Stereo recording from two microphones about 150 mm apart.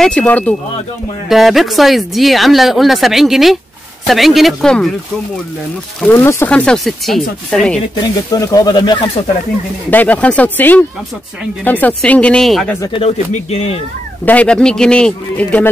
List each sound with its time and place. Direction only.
0.0 s speech: 5° left (ahead or behind)
1.3 s speech: centre (ahead or behind)
6.1 s speech: 20° left (ahead or behind)
6.5 s speech: 5° left (ahead or behind)
7.9 s speech: 25° left (ahead or behind)
9.8 s speech: 10° left (ahead or behind)
12.8 s speech: 35° left (ahead or behind)
14.2 s speech: 10° left (ahead or behind)